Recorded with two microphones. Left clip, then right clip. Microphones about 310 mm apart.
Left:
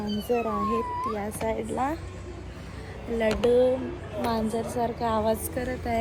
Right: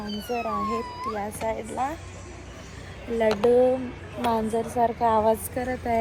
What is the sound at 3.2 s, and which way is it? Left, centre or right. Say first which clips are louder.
A woman's voice: right 2 dB; centre.